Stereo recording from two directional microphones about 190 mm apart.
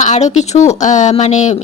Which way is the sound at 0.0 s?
35° left (ahead or behind).